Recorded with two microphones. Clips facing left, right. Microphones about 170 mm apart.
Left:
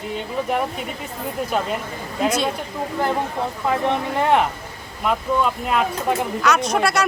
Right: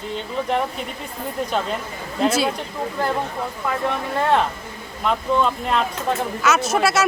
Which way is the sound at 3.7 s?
20° left (ahead or behind).